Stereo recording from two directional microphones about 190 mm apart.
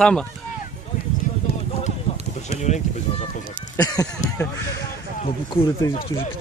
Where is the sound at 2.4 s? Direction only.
35° left (ahead or behind).